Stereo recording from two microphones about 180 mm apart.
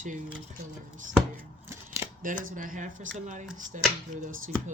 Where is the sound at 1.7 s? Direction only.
15° right (ahead or behind).